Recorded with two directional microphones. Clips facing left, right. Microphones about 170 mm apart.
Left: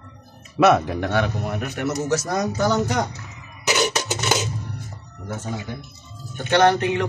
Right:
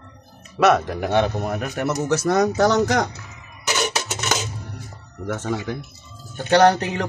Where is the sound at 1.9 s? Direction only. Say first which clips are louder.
Right 3 dB; 65° right (ahead or behind); by 3.0 s 90° right.